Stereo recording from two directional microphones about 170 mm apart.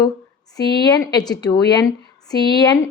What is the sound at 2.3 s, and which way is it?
Speech, 25° left (ahead or behind).